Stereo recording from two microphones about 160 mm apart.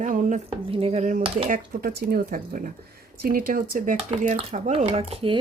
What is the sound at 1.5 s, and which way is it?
Speech, 60° right (ahead or behind).